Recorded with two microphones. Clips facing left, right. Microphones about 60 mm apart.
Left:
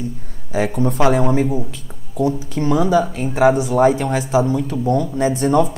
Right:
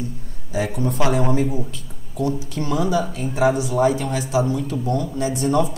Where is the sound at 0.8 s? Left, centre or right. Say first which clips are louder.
Left 6 dB; left.